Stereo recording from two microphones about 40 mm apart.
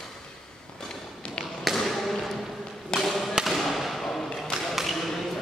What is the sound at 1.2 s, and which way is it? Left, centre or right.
Tap, left.